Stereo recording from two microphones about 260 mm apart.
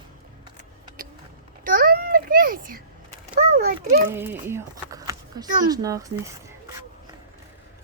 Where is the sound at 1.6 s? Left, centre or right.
Right.